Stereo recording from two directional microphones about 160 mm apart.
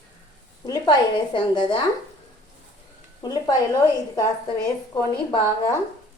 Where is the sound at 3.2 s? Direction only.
25° left (ahead or behind).